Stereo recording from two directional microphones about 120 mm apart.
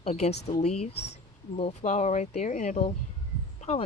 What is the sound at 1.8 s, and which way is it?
Speech, 75° left (ahead or behind).